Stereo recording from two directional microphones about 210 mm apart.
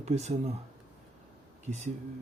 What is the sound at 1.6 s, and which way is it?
Speech, 35° right (ahead or behind).